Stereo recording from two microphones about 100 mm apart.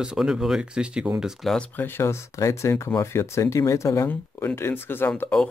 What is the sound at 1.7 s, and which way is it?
Speech, 20° left (ahead or behind).